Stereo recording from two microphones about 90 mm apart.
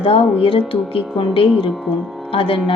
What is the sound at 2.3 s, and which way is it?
Speech, 90° left.